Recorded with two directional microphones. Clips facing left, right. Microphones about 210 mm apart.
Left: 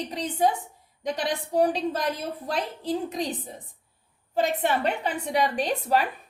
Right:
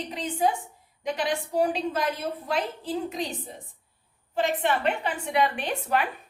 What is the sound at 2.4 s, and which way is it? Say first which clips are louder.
A woman's voice: left 1 dB; 40° left (ahead or behind).